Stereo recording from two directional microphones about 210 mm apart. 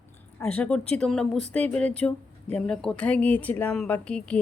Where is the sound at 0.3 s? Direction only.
5° left (ahead or behind).